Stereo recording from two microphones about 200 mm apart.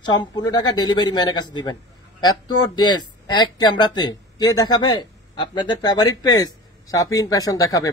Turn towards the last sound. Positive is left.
turn(degrees=20)  # may be behind; listen again after turning